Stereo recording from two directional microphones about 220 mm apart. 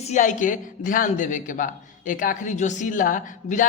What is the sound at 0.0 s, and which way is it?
A woman's voice, 35° left (ahead or behind).